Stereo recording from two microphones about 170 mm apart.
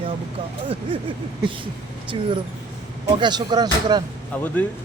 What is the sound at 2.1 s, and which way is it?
Speech, 30° right (ahead or behind).